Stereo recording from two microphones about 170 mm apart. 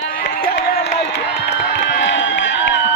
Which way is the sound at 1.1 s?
90° left.